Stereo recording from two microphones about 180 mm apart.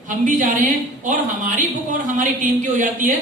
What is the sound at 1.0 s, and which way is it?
Speech, 45° right (ahead or behind).